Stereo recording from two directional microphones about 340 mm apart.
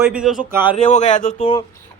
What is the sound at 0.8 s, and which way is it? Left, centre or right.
Speech, left.